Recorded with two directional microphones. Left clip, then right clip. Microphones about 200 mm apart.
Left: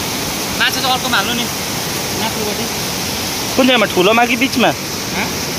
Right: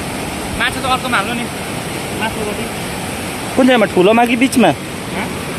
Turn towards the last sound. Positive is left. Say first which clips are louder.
# right 1 dB
turn(degrees=-35)  # may be behind; listen again after turning